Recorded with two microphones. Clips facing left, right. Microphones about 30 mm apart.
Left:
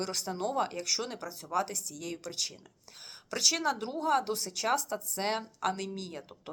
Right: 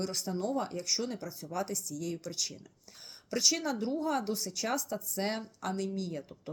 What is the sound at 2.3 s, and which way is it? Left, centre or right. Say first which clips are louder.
Speech: left 1 dB; left.